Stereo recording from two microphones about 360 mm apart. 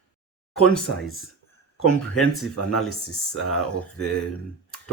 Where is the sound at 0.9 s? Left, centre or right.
Left.